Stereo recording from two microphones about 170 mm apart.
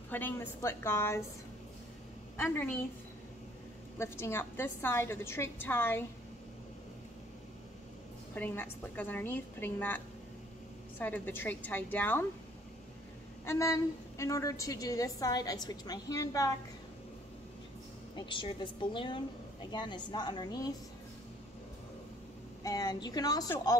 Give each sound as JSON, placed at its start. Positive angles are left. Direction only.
{"t": 0.1, "sound": "a woman's voice", "side_deg": 10}
{"t": 2.3, "sound": "a woman's voice", "side_deg": 15}
{"t": 4.0, "sound": "a woman's voice", "side_deg": 15}
{"t": 8.4, "sound": "a woman's voice", "side_deg": 10}
{"t": 13.5, "sound": "a woman's voice", "side_deg": 15}
{"t": 18.1, "sound": "a woman's voice", "side_deg": 30}
{"t": 22.6, "sound": "a woman's voice", "side_deg": 20}